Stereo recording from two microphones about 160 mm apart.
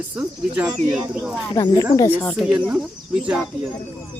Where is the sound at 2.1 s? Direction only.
10° left (ahead or behind).